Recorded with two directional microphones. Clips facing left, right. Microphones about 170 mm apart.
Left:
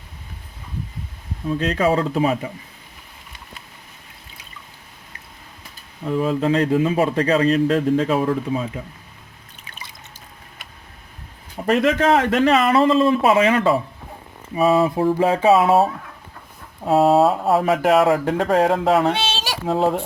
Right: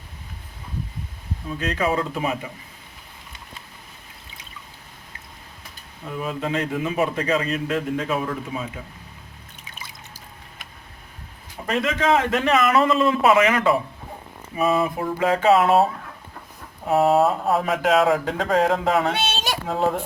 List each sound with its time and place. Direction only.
1.5 s speech: 35° left (ahead or behind)
6.2 s speech: 35° left (ahead or behind)
11.6 s speech: 35° left (ahead or behind)
14.6 s a sound: 30° left (ahead or behind)
17.2 s speech: centre (ahead or behind)